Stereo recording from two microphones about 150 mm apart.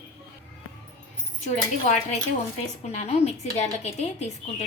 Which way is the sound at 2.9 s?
50° left (ahead or behind).